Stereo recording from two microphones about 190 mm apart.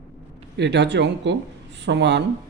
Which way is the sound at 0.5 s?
65° right (ahead or behind).